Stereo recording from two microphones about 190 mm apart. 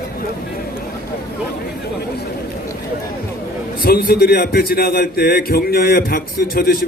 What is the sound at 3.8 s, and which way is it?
A man's voice, 50° left (ahead or behind).